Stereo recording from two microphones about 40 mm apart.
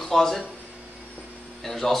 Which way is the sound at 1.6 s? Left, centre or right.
Centre.